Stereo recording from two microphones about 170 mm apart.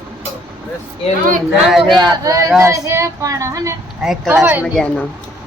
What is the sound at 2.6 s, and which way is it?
Child singing, 15° right (ahead or behind).